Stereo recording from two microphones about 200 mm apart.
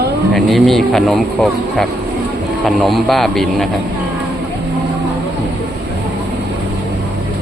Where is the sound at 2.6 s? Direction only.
Centre (ahead or behind).